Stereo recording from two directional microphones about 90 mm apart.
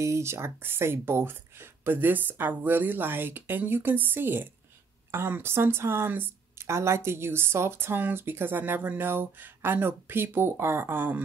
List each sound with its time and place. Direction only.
0.0 s speech: 30° right (ahead or behind)